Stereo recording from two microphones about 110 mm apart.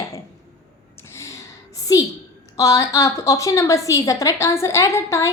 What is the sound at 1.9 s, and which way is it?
A woman's voice, 30° left (ahead or behind).